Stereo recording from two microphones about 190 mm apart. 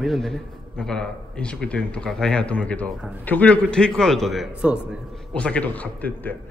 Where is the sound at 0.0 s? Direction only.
Centre (ahead or behind).